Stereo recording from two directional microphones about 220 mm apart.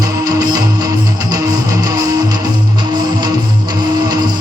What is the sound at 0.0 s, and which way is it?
Music, 15° right (ahead or behind).